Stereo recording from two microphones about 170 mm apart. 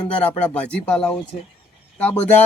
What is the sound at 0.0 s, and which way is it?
Speech, 5° left (ahead or behind).